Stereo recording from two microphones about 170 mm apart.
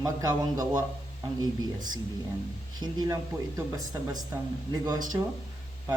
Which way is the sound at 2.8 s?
25° right (ahead or behind).